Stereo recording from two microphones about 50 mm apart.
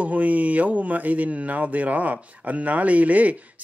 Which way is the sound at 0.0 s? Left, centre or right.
Right.